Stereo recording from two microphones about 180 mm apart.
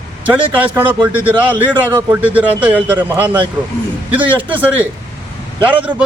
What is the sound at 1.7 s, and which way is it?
Speech, 25° right (ahead or behind).